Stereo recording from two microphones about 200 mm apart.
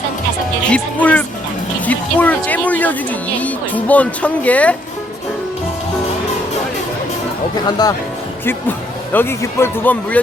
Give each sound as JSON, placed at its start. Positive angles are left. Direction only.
{"t": 0.6, "sound": "speech", "side_deg": 5}
{"t": 7.8, "sound": "speech", "side_deg": 20}
{"t": 9.1, "sound": "speech", "side_deg": 10}